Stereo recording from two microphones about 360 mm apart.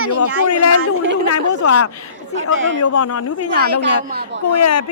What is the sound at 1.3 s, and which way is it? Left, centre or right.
Speech, left.